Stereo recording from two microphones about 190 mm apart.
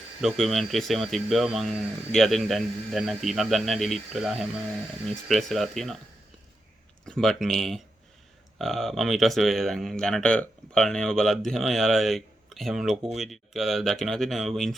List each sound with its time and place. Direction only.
0.2 s speech: centre (ahead or behind)
7.0 s speech: centre (ahead or behind)